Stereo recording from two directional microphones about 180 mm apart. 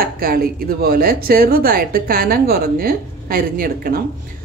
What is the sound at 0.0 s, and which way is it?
A woman's voice, 55° right (ahead or behind).